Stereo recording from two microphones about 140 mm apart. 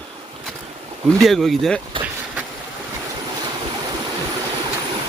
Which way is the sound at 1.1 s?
Centre (ahead or behind).